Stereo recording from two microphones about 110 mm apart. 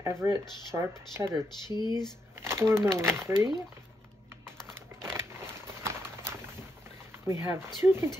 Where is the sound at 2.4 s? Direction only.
25° right (ahead or behind).